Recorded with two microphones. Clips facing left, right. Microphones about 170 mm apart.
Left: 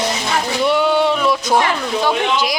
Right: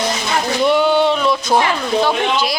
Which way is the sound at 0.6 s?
Centre (ahead or behind).